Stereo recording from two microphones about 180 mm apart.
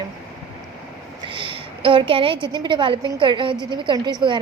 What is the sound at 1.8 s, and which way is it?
A woman's voice, 30° right (ahead or behind).